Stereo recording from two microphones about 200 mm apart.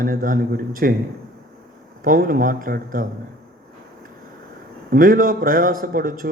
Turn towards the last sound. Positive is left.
turn(degrees=-45)  # may be behind; listen again after turning